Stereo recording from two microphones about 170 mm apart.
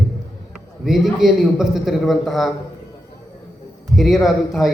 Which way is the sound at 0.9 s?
Centre (ahead or behind).